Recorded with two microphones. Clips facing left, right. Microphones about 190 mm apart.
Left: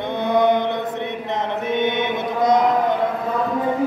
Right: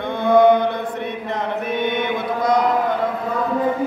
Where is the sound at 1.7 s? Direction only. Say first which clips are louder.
Left 1 dB; 20° left (ahead or behind).